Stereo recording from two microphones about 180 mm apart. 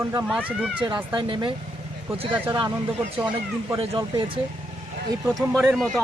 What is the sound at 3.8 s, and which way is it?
Speech, 25° right (ahead or behind).